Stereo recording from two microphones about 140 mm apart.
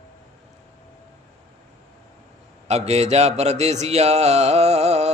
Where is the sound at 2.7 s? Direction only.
50° right (ahead or behind).